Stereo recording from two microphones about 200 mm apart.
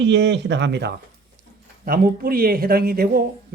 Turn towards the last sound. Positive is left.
turn(degrees=-50)  # may be behind; listen again after turning